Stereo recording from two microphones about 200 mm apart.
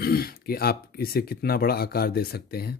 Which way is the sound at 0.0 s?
50° left (ahead or behind).